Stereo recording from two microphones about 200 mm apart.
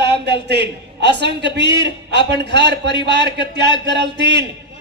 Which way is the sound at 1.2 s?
60° right (ahead or behind).